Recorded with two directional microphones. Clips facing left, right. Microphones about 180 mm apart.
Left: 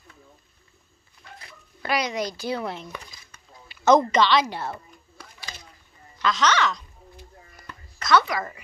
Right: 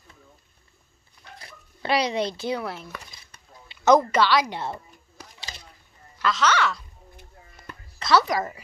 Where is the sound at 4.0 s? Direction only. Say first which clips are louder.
Left 1 dB; 10° right (ahead or behind).